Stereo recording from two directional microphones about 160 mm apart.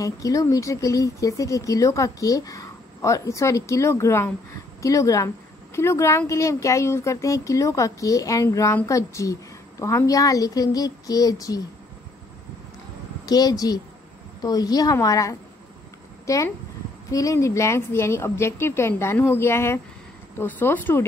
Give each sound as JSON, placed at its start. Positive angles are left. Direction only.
{"t": 0.0, "sound": "speech", "side_deg": 20}
{"t": 13.2, "sound": "a woman's voice", "side_deg": 25}